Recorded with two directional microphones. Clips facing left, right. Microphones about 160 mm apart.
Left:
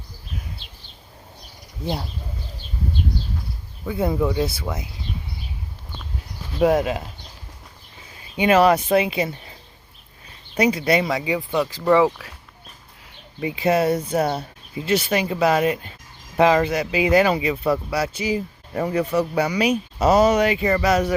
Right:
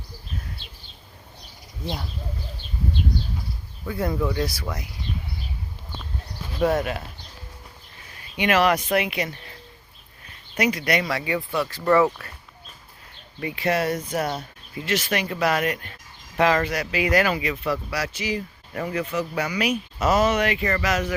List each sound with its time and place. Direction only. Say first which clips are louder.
3.8 s speech: left 4 dB; 20° left (ahead or behind)
6.6 s speech: left 4 dB; 20° left (ahead or behind)
8.4 s speech: left 5 dB; 30° left (ahead or behind)
10.6 s speech: left 4 dB; 30° left (ahead or behind); by 12.2 s 10° left (ahead or behind)
13.4 s speech: left 4 dB; 25° left (ahead or behind)